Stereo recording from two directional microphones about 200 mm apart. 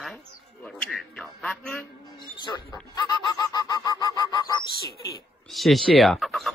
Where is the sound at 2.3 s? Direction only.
20° left (ahead or behind).